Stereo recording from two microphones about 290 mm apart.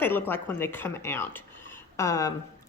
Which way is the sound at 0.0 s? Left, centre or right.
Centre.